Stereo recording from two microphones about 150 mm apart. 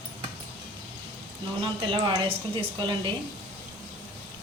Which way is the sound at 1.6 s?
35° right (ahead or behind).